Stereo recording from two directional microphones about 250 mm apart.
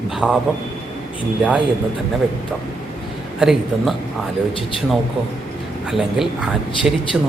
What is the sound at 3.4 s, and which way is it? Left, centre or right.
Speech, centre.